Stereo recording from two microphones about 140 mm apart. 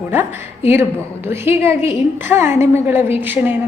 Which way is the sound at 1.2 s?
15° right (ahead or behind).